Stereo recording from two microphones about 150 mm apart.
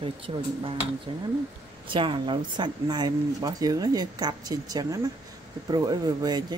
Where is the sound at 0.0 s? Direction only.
35° right (ahead or behind).